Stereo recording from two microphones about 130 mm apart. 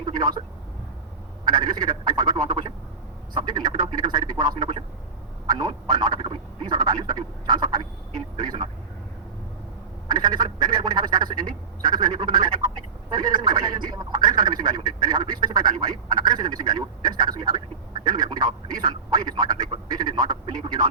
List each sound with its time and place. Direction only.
0.0 s speech: 35° right (ahead or behind)
1.5 s speech: 30° right (ahead or behind)
10.1 s speech: 35° right (ahead or behind)